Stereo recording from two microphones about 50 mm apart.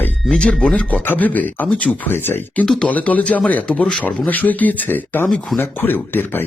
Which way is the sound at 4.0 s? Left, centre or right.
Left.